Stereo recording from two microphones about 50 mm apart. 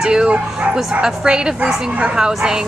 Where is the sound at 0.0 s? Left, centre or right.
Centre.